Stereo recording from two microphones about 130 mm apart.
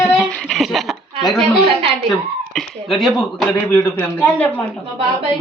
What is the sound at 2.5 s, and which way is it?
Speech, 5° left (ahead or behind).